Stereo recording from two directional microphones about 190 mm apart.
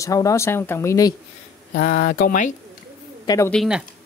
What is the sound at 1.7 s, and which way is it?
Speech, 50° left (ahead or behind).